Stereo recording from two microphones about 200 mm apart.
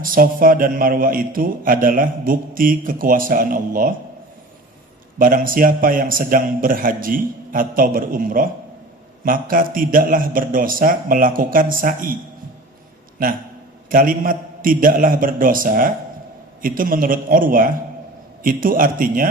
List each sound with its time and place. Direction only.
0.0 s a man's voice: 45° right (ahead or behind)
5.2 s a man's voice: 45° right (ahead or behind)
13.9 s a man's voice: 45° right (ahead or behind)